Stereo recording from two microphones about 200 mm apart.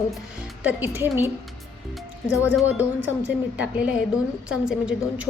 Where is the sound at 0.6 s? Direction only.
10° right (ahead or behind).